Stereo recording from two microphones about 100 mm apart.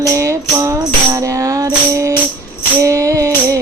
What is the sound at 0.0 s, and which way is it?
Music, 30° right (ahead or behind).